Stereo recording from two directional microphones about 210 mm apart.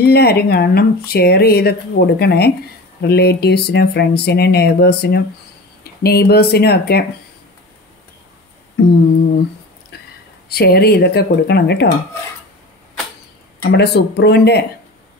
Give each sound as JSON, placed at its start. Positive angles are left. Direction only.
{"t": 0.0, "sound": "speech", "side_deg": 50}
{"t": 9.9, "sound": "whispering", "side_deg": 50}
{"t": 10.5, "sound": "speech", "side_deg": 50}
{"t": 13.6, "sound": "speech", "side_deg": 50}